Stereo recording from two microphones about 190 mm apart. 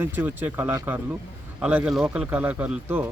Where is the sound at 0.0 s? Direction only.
10° right (ahead or behind).